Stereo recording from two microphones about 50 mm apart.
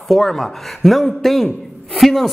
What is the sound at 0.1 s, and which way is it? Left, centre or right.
Speech, centre.